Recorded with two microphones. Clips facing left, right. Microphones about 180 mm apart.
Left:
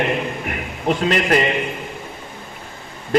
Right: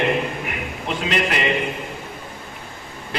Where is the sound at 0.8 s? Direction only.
45° left (ahead or behind).